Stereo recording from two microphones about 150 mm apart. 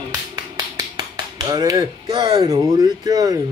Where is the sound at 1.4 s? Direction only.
25° right (ahead or behind).